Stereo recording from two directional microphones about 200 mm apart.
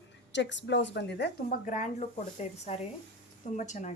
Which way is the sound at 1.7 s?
35° left (ahead or behind).